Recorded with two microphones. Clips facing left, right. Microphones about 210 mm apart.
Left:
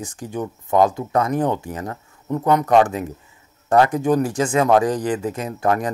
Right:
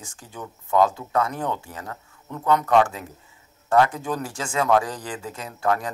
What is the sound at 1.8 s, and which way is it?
Speech, 35° left (ahead or behind).